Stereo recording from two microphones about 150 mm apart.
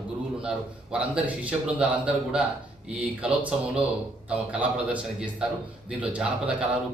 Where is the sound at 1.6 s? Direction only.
5° right (ahead or behind).